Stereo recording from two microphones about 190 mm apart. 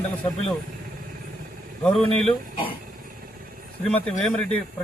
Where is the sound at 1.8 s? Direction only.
5° left (ahead or behind).